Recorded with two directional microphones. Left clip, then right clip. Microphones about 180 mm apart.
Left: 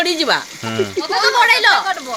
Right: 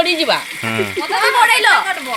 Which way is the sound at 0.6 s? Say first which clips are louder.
Right 2 dB; 5° left (ahead or behind).